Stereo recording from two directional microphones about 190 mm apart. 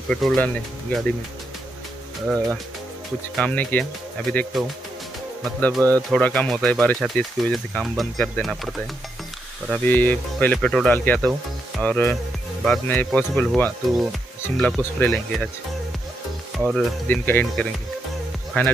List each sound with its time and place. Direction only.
0.1 s speech: centre (ahead or behind)
2.2 s speech: centre (ahead or behind)
5.8 s speech: 20° right (ahead or behind)
6.0 s speech: 5° left (ahead or behind)
9.8 s speech: 10° left (ahead or behind)
16.5 s speech: centre (ahead or behind)